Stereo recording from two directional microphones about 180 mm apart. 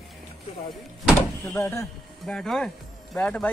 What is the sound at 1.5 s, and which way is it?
Speech, 15° left (ahead or behind).